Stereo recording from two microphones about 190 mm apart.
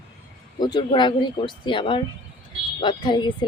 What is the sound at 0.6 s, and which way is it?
Speech, 25° left (ahead or behind).